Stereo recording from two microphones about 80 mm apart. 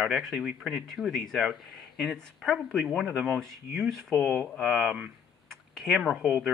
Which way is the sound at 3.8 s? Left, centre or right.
Centre.